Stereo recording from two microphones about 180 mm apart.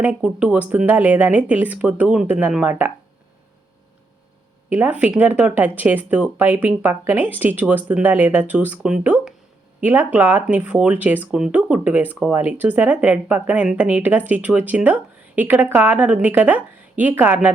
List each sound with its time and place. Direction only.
0.0 s speech: 5° right (ahead or behind)
4.7 s speech: 10° right (ahead or behind)